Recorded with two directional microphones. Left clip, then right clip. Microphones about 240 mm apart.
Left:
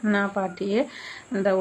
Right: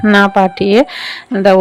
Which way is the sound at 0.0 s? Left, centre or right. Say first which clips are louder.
Right 16 dB; right.